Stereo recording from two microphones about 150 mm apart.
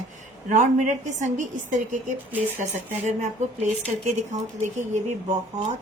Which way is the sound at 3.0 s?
50° right (ahead or behind).